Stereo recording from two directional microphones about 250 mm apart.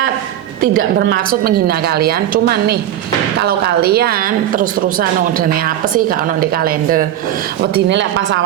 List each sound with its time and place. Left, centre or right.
0.8 s a woman's voice: right